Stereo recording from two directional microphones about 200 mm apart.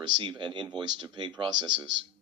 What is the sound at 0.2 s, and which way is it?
Speech, 25° right (ahead or behind).